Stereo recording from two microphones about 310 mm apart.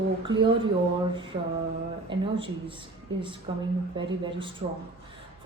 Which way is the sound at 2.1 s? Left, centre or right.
Centre.